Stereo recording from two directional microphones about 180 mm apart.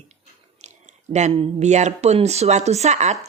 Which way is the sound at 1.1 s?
40° right (ahead or behind).